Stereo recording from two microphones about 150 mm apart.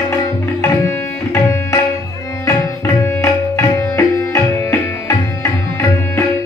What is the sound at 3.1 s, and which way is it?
Music, 20° left (ahead or behind).